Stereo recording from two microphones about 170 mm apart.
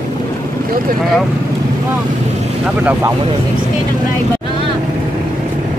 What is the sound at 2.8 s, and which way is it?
Speech, 10° right (ahead or behind).